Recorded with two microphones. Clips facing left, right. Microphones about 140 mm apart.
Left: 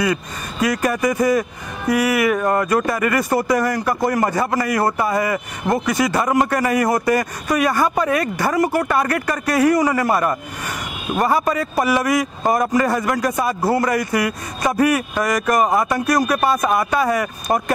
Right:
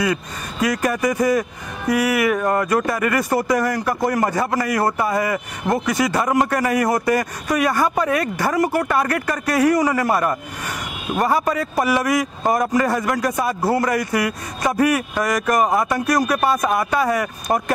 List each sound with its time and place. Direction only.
0.0 s speech: 15° left (ahead or behind)